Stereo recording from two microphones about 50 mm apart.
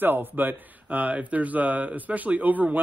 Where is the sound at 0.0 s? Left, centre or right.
Right.